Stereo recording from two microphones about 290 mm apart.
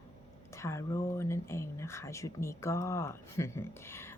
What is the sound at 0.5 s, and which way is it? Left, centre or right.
Speech, centre.